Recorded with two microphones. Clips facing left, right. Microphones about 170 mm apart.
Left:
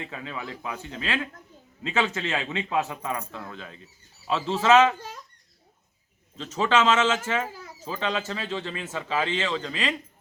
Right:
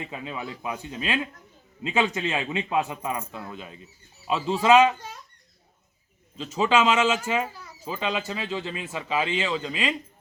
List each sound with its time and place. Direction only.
0.1 s speech: 15° right (ahead or behind)
6.3 s speech: 10° right (ahead or behind)